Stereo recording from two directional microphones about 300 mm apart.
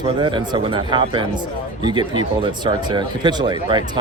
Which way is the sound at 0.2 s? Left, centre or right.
Centre.